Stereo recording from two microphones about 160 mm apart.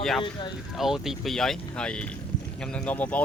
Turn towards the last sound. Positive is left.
turn(degrees=10)  # may be behind; listen again after turning